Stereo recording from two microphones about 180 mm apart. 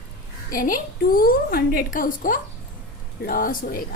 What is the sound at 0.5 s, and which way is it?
A woman's voice, 50° left (ahead or behind).